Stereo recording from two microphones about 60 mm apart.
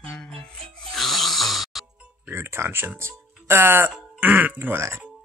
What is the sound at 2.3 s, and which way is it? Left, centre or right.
Speech, right.